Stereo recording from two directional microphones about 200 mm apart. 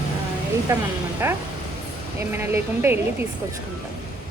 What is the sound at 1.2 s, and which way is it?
A woman's voice, 15° right (ahead or behind).